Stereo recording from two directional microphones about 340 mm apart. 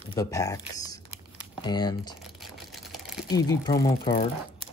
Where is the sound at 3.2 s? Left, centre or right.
Centre.